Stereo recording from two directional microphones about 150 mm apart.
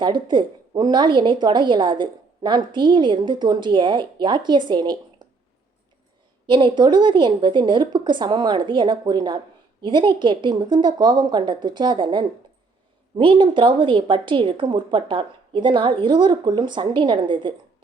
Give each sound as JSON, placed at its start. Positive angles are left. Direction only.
{"t": 0.0, "sound": "a woman's voice", "side_deg": -30}
{"t": 6.5, "sound": "a woman's voice", "side_deg": -30}